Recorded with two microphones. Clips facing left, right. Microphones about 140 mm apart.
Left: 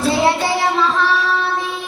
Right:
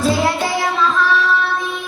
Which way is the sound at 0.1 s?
30° left (ahead or behind).